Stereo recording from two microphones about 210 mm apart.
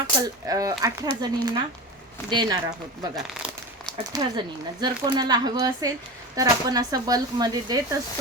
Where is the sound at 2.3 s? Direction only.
20° right (ahead or behind).